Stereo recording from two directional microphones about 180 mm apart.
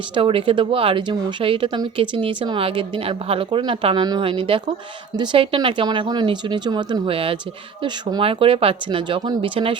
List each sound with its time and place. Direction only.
0.1 s speech: 30° right (ahead or behind)